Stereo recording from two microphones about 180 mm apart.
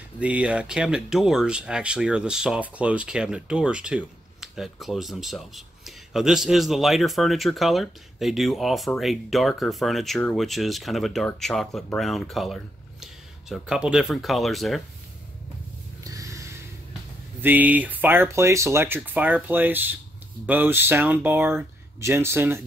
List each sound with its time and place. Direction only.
0.2 s speech: 5° right (ahead or behind)
16.0 s a sound: 20° right (ahead or behind)
17.4 s speech: 10° right (ahead or behind)